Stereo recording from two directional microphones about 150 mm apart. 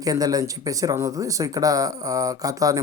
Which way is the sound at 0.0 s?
25° right (ahead or behind).